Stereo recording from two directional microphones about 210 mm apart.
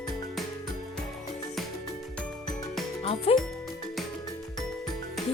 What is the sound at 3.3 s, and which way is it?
Music, centre (ahead or behind).